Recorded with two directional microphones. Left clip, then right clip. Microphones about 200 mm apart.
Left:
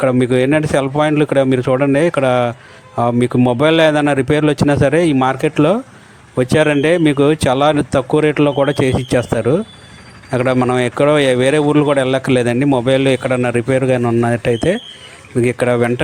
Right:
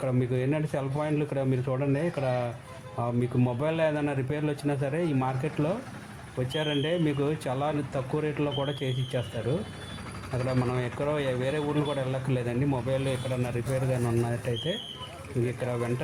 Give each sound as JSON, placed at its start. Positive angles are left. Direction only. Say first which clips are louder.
{"t": 0.0, "sound": "speech", "louder": "left 16 dB", "side_deg": 50}
{"t": 10.3, "sound": "speech", "louder": "left 16 dB", "side_deg": 50}